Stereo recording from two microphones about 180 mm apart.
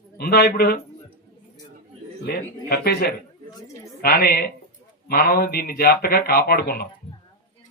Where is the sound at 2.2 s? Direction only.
60° left (ahead or behind).